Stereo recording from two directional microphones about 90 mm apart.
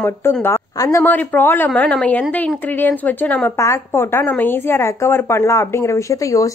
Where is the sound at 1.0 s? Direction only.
20° left (ahead or behind).